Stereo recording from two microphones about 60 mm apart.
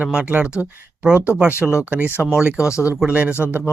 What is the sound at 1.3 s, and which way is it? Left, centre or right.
Speech, centre.